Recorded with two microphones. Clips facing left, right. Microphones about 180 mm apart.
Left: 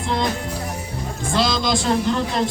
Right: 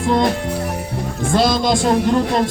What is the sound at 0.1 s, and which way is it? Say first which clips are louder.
Music: right 6 dB; 55° right (ahead or behind).